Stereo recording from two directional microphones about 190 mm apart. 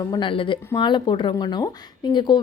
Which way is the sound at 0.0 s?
25° left (ahead or behind).